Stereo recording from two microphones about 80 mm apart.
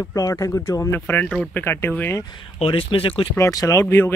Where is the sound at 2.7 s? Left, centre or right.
Left.